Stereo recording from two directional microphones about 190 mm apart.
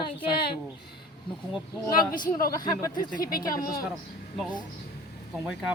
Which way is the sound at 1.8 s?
15° left (ahead or behind).